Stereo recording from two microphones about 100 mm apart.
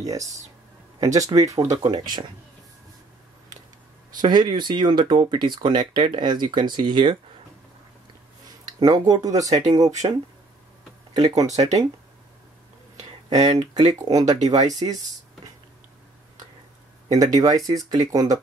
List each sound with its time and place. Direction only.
0.1 s speech: 35° right (ahead or behind)
1.8 s speech: 45° right (ahead or behind)
4.2 s speech: 45° right (ahead or behind)
8.7 s speech: 40° right (ahead or behind)
11.1 s speech: 35° right (ahead or behind)
13.3 s speech: 40° right (ahead or behind)
17.1 s speech: 40° right (ahead or behind)